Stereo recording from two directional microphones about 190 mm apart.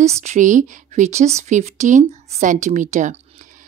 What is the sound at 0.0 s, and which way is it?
A woman's voice, 35° right (ahead or behind).